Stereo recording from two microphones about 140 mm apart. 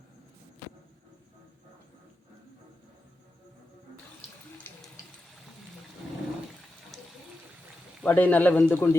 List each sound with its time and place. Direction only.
4.7 s water: 15° left (ahead or behind)
8.0 s speech: 10° left (ahead or behind)